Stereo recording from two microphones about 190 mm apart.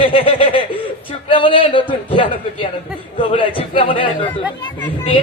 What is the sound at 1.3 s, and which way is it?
Speech, 25° left (ahead or behind).